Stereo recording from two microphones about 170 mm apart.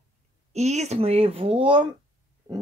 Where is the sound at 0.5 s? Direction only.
40° right (ahead or behind).